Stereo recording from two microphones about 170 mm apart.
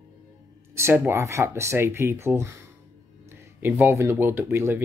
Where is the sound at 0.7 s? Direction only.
15° right (ahead or behind).